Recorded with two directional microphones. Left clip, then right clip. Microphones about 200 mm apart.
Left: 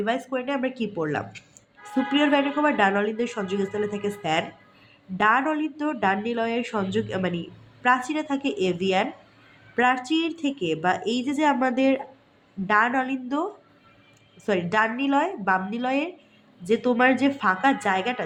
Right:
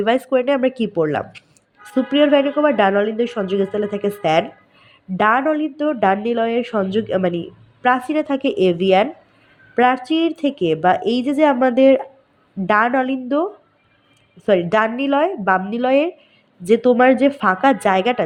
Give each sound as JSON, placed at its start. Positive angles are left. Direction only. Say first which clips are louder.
{"t": 0.0, "sound": "a woman's voice", "louder": "right 10 dB", "side_deg": -45}